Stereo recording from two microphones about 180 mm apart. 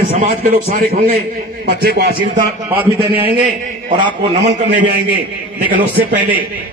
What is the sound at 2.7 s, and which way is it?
Speech, 10° right (ahead or behind).